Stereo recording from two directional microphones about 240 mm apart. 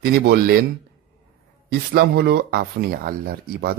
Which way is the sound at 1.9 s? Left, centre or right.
Right.